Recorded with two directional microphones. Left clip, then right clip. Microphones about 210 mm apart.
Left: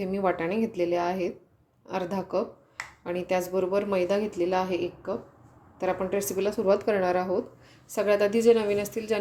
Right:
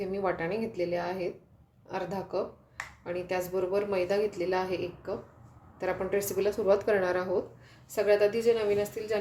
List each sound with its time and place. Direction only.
0.0 s a woman's voice: 30° left (ahead or behind)